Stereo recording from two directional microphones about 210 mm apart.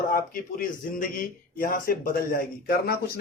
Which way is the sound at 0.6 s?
40° left (ahead or behind).